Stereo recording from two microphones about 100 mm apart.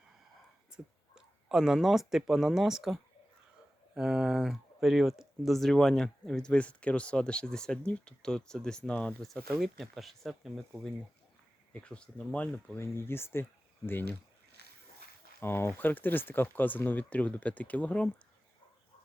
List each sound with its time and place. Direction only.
0.7 s speech: 5° right (ahead or behind); by 14.2 s 20° left (ahead or behind)
15.4 s speech: 25° left (ahead or behind)